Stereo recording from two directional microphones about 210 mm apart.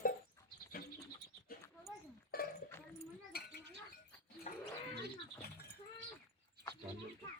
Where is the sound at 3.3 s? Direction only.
50° left (ahead or behind).